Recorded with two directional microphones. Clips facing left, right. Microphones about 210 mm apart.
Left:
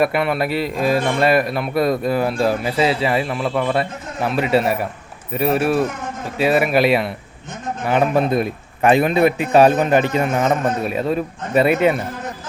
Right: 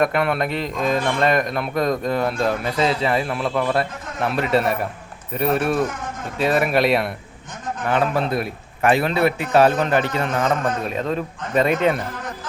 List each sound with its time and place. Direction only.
0.0 s a man's voice: 5° left (ahead or behind)
7.9 s a man's voice: 15° left (ahead or behind)